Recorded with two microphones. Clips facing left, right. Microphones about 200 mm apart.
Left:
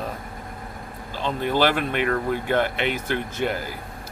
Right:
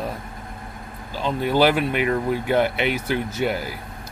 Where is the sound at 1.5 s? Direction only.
10° right (ahead or behind).